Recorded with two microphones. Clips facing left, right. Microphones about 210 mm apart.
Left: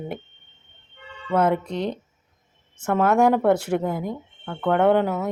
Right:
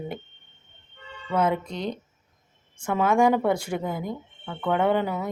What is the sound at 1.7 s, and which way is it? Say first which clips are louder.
Speech: left 4 dB; 35° left (ahead or behind).